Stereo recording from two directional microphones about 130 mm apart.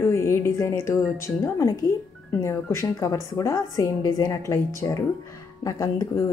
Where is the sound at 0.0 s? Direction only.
20° left (ahead or behind).